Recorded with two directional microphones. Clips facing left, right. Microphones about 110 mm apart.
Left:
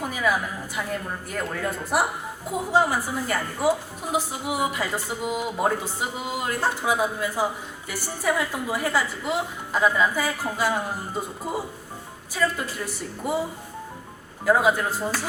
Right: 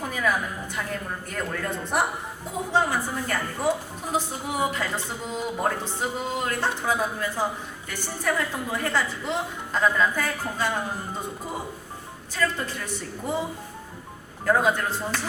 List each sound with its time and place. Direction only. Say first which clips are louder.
0.0 s a woman's voice: left 1 dB; 5° left (ahead or behind)
12.3 s a woman's voice: left 1 dB; 5° left (ahead or behind)
14.4 s a woman's voice: left 2 dB; 5° left (ahead or behind)